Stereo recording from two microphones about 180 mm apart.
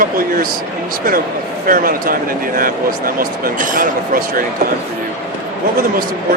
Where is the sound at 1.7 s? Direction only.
50° right (ahead or behind).